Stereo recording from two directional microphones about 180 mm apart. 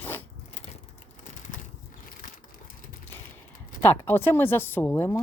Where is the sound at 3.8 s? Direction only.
10° left (ahead or behind).